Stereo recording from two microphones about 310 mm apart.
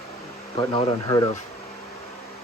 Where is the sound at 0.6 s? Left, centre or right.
Centre.